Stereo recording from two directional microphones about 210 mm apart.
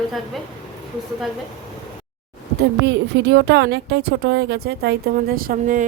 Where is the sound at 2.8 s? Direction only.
55° right (ahead or behind).